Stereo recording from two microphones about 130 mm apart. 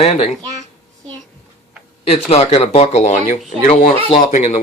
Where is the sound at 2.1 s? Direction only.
50° left (ahead or behind); by 4.6 s 70° left (ahead or behind).